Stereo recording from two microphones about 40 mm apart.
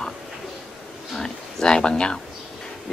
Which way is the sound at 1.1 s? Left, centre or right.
Centre.